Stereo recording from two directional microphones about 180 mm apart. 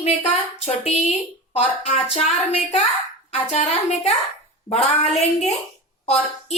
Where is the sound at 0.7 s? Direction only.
35° left (ahead or behind).